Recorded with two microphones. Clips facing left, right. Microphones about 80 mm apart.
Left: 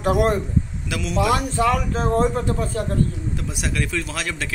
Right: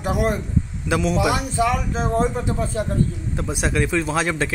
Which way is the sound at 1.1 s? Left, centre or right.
Centre.